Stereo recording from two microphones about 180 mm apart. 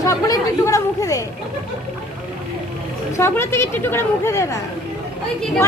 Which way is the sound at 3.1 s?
15° left (ahead or behind).